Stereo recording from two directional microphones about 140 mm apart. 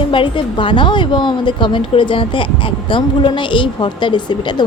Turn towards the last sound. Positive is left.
turn(degrees=35)  # may be behind; listen again after turning